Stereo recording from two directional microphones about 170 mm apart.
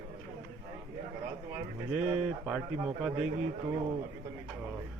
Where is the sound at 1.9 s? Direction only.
5° right (ahead or behind).